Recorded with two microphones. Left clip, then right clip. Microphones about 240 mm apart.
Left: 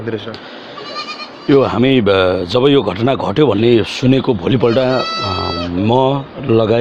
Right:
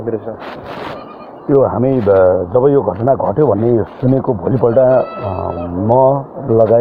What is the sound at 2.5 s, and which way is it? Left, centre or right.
Speech, left.